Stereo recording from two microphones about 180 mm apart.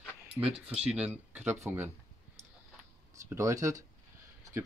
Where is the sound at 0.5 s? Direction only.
5° right (ahead or behind).